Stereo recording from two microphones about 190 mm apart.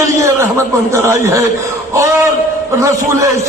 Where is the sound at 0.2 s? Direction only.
15° right (ahead or behind).